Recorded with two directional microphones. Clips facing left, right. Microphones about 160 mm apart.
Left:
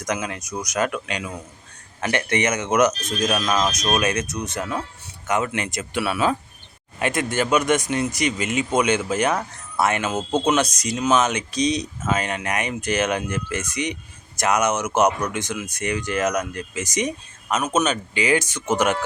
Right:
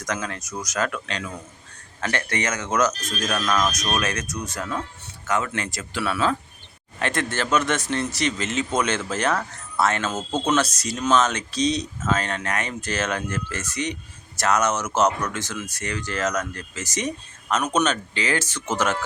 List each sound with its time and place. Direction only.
0.0 s a man's voice: 15° left (ahead or behind)